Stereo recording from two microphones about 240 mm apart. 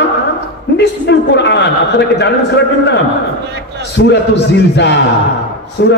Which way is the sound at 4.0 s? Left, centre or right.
Left.